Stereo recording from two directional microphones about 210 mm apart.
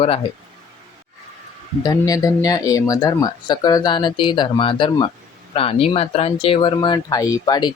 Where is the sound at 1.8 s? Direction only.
20° left (ahead or behind).